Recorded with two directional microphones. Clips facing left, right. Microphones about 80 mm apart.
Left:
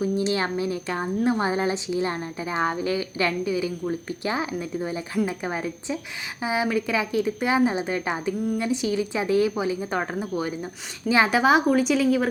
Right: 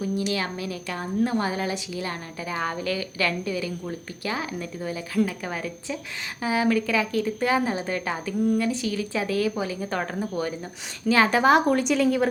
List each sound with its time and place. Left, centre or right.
0.0 s a woman's voice: left; by 12.3 s centre